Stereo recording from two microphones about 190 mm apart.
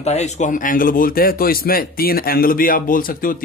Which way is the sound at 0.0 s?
35° left (ahead or behind).